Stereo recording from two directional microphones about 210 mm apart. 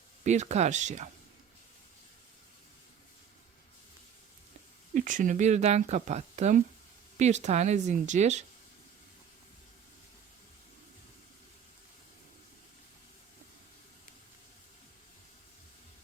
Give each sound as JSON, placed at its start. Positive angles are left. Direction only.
{"t": 0.3, "sound": "speech", "side_deg": -35}
{"t": 4.9, "sound": "speech", "side_deg": -40}